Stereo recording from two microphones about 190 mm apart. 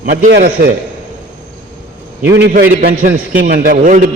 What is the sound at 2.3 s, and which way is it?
A man's voice, 60° right (ahead or behind).